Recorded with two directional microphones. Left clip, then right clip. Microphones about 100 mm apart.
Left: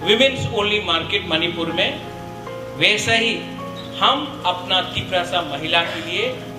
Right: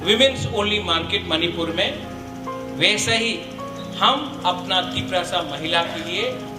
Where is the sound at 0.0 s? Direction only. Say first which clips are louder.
Left 1 dB; 25° right (ahead or behind).